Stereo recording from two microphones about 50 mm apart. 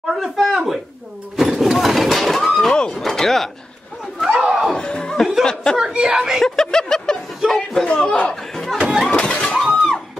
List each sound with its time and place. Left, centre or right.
0.1 s speech: centre
1.3 s a sound: centre
2.7 s a sound: centre
3.0 s speech: centre
4.5 s a sound: centre
4.7 s speech: centre
5.8 s speech: centre
6.4 s speech: centre
7.9 s speech: centre
8.7 s speech: centre
9.2 s a sound: centre
9.6 s music: centre